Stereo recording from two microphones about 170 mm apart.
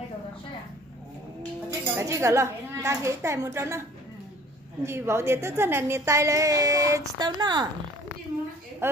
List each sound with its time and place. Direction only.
1.7 s a child's voice: 15° right (ahead or behind)
4.8 s a woman's voice: 15° right (ahead or behind)
8.8 s a woman's voice: 15° right (ahead or behind)